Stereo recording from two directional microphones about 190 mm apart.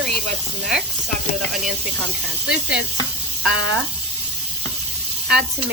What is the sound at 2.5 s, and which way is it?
Speech, 5° right (ahead or behind).